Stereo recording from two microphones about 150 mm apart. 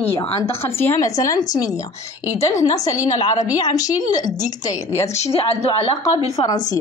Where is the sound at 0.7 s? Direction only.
15° left (ahead or behind).